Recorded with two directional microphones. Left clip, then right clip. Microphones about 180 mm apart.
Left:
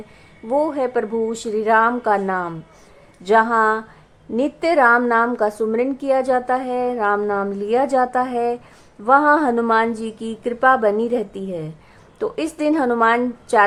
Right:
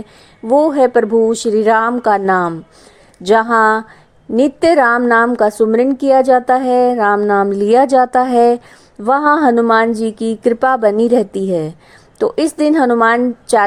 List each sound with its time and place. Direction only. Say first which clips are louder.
0.4 s a woman's voice: right 9 dB; 35° right (ahead or behind)